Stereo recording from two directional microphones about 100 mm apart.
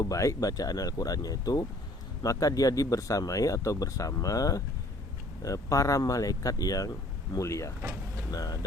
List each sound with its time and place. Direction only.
0.0 s speech: 35° left (ahead or behind)
7.8 s speech: 25° right (ahead or behind)
8.3 s speech: 40° left (ahead or behind)